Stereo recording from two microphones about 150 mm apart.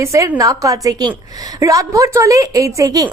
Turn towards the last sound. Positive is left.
turn(degrees=-25)  # may be behind; listen again after turning